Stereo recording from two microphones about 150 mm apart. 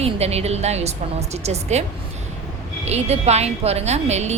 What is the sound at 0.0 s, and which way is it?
Speech, 45° right (ahead or behind).